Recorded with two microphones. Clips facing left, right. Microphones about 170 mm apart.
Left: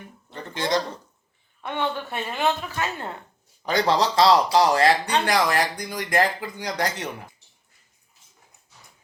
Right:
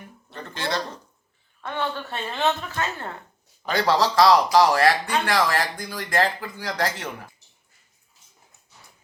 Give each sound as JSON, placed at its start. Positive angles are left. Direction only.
{"t": 0.3, "sound": "a sound", "side_deg": 15}
{"t": 1.6, "sound": "speech", "side_deg": 20}
{"t": 3.7, "sound": "speech", "side_deg": 20}